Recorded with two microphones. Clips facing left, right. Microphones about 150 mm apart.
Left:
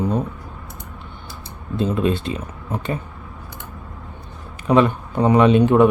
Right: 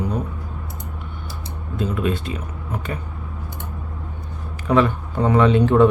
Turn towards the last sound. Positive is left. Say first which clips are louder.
# left 1 dB
turn(degrees=15)  # may be behind; listen again after turning